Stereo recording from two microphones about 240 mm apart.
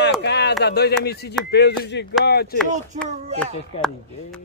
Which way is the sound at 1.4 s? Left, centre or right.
Left.